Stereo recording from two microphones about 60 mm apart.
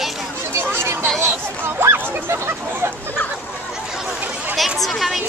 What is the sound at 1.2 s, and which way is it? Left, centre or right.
Hubbub, right.